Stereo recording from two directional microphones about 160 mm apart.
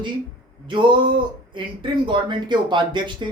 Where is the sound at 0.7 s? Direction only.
30° right (ahead or behind).